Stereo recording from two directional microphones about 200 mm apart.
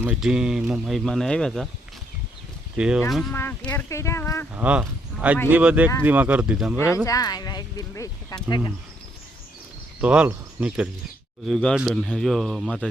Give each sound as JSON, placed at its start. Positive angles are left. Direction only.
{"t": 0.0, "sound": "speech", "side_deg": -5}
{"t": 2.7, "sound": "speech", "side_deg": -5}
{"t": 3.3, "sound": "speech", "side_deg": 10}
{"t": 4.5, "sound": "speech", "side_deg": -5}
{"t": 6.7, "sound": "speech", "side_deg": 15}
{"t": 10.0, "sound": "speech", "side_deg": -5}